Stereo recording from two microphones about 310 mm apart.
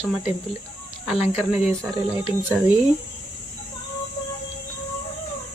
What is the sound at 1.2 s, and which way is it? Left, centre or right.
Speech, left.